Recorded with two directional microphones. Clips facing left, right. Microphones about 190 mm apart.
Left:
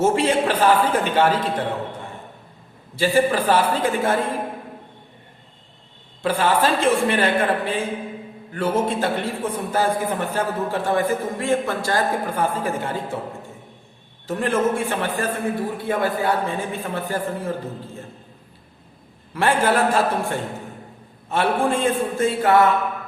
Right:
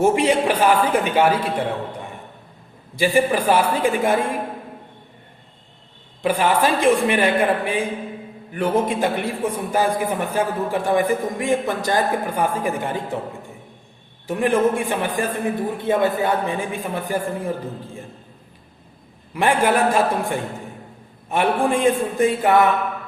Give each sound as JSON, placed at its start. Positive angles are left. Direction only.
{"t": 0.0, "sound": "a man's voice", "side_deg": -15}
{"t": 2.9, "sound": "a man's voice", "side_deg": -15}
{"t": 6.2, "sound": "a man's voice", "side_deg": -15}
{"t": 14.3, "sound": "a man's voice", "side_deg": -15}
{"t": 19.3, "sound": "a man's voice", "side_deg": -15}